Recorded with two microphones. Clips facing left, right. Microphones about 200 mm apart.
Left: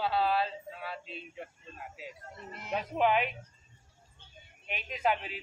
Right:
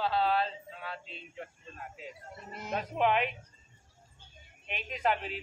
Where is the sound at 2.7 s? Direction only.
Centre (ahead or behind).